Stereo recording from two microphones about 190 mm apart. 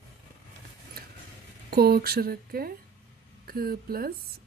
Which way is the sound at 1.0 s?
50° right (ahead or behind).